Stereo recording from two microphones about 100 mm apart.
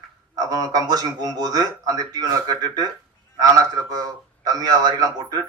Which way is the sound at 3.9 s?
40° right (ahead or behind).